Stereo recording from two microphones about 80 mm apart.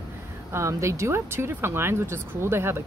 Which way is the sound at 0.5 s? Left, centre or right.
Right.